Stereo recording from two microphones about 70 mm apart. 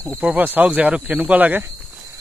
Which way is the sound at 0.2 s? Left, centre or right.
Right.